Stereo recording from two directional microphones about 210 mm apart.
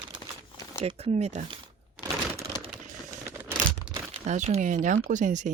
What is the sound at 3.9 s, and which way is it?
Speech, 30° right (ahead or behind).